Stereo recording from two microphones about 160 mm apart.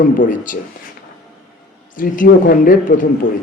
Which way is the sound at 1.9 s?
60° left (ahead or behind).